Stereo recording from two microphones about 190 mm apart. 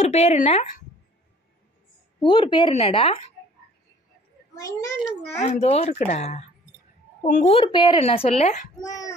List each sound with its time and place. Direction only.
0.0 s speech: 35° left (ahead or behind)
2.2 s speech: 25° left (ahead or behind)
4.6 s a child's voice: 15° left (ahead or behind)
5.4 s speech: 35° left (ahead or behind)
7.5 s speech: 25° left (ahead or behind)
8.8 s speech: 20° left (ahead or behind)